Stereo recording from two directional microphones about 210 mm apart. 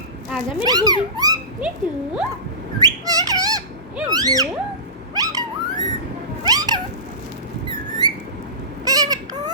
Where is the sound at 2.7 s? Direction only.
15° right (ahead or behind).